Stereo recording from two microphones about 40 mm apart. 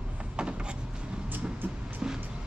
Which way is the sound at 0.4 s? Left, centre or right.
Right.